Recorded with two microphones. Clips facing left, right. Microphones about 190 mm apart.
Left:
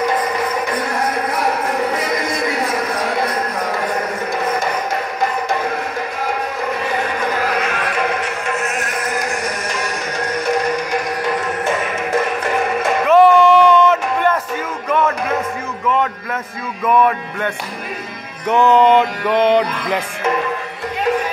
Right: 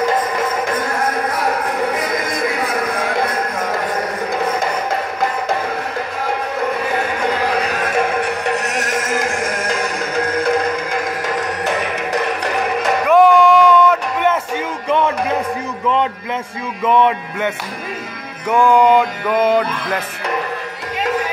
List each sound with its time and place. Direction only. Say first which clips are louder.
7.6 s music: right 2 dB; 40° right (ahead or behind)
8.5 s music: right 2 dB; 75° right (ahead or behind)
9.4 s music: right 3 dB; 50° right (ahead or behind)
13.1 s a sound: left 1 dB; 10° right (ahead or behind)
14.9 s music: right 1 dB; 30° right (ahead or behind)
16.8 s music: even; 20° right (ahead or behind)
18.5 s mantra: even; 10° right (ahead or behind)